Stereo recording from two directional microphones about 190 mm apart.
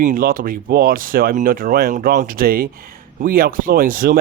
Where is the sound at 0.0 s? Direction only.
50° right (ahead or behind).